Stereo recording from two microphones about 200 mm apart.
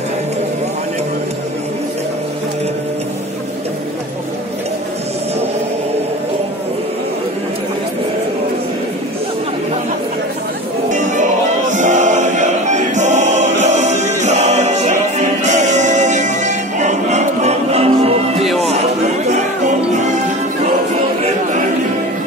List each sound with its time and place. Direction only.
10.9 s music: 40° right (ahead or behind)
11.7 s choir: 40° right (ahead or behind)
18.4 s music: centre (ahead or behind)
18.7 s music: 35° right (ahead or behind)